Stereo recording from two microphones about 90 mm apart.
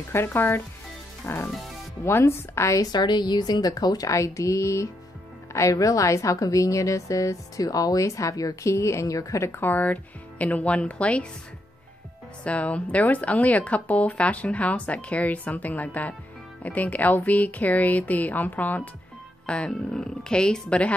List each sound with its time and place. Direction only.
0.1 s a woman's voice: 25° left (ahead or behind)
12.4 s speech: 15° left (ahead or behind)
19.4 s music: 10° left (ahead or behind)
19.7 s speech: 5° left (ahead or behind)